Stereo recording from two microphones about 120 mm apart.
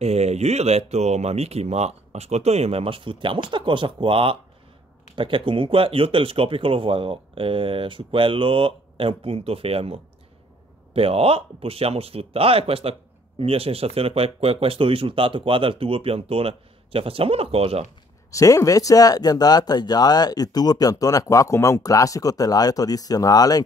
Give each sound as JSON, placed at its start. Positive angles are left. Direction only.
{"t": 0.0, "sound": "speech", "side_deg": -60}
{"t": 18.3, "sound": "speech", "side_deg": 25}